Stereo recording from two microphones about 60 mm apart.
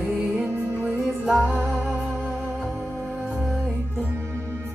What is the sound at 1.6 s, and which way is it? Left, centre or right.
Music, centre.